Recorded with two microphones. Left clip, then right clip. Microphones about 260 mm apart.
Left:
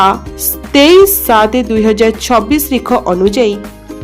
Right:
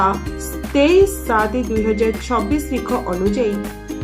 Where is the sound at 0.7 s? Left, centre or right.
Left.